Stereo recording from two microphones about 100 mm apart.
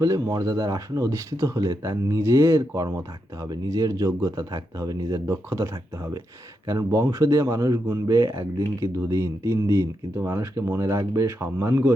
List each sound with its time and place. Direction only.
0.0 s speech: 35° right (ahead or behind)